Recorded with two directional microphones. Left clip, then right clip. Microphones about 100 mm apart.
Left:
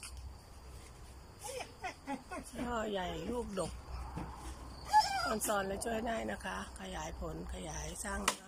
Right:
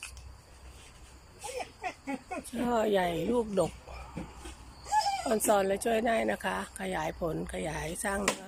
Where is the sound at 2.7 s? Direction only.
40° right (ahead or behind).